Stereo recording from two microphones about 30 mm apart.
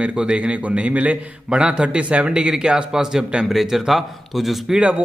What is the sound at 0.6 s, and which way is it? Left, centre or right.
Speech, right.